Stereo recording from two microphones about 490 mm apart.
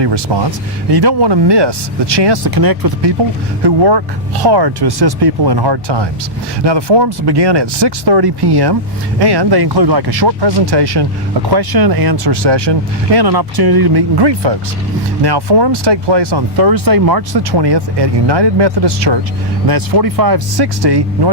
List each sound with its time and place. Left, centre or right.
0.0 s speech: right